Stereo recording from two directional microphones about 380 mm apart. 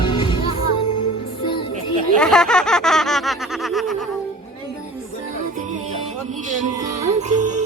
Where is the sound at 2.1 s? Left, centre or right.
Centre.